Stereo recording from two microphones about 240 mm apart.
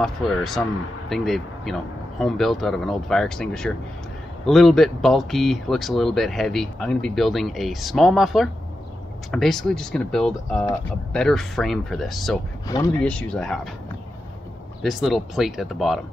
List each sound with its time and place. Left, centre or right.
0.0 s speech: centre
14.8 s speech: centre